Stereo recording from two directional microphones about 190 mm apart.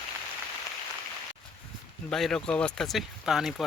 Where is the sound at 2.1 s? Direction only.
5° left (ahead or behind).